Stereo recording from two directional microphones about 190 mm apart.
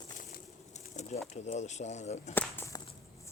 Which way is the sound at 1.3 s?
40° left (ahead or behind).